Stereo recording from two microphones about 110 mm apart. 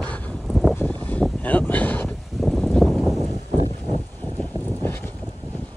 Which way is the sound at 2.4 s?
Centre (ahead or behind).